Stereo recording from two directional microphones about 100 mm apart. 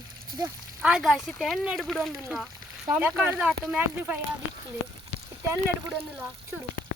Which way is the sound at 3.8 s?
15° right (ahead or behind).